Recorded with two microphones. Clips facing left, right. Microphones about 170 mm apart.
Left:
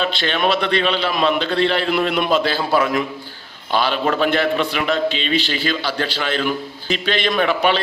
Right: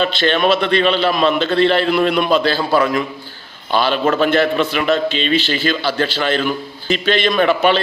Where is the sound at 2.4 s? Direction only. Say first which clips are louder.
Right 3 dB; 5° left (ahead or behind).